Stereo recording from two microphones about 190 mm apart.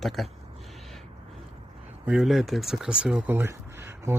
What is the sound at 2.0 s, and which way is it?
Speech, 5° right (ahead or behind).